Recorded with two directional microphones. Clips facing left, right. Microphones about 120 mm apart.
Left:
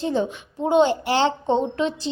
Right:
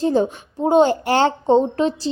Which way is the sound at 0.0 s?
40° right (ahead or behind).